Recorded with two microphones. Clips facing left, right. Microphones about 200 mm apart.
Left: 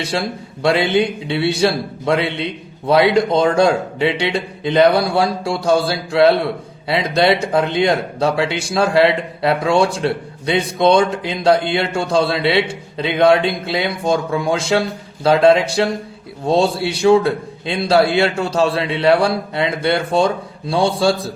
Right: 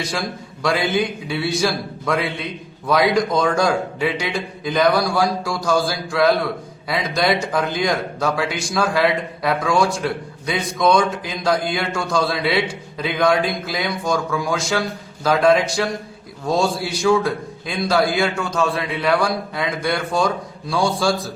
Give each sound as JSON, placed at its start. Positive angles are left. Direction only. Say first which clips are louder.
{"t": 0.0, "sound": "a man's voice", "louder": "left 4 dB", "side_deg": 30}